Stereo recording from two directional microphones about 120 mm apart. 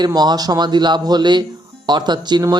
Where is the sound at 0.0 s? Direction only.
35° right (ahead or behind).